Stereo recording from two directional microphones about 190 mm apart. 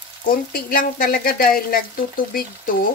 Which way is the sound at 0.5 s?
45° left (ahead or behind).